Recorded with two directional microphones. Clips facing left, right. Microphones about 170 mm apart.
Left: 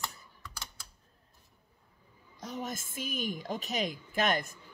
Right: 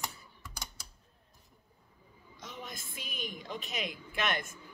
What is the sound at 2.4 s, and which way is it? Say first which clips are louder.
A woman's voice: left 7 dB; 40° left (ahead or behind).